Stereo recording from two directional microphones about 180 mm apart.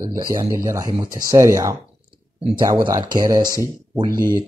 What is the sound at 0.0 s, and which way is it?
Speech, 20° right (ahead or behind).